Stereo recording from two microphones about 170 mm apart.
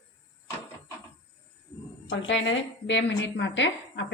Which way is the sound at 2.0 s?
90° left.